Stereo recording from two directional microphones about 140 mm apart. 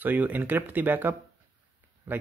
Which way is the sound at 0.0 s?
10° right (ahead or behind).